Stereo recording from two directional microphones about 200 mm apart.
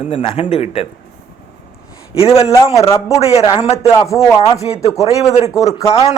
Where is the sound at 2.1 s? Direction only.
30° left (ahead or behind).